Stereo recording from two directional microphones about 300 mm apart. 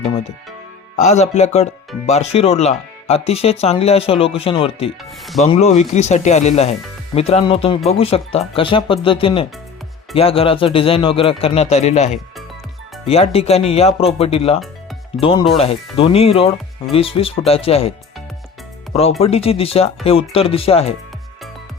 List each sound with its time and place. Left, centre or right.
0.0 s music: left
0.9 s speech: left
19.2 s speech: centre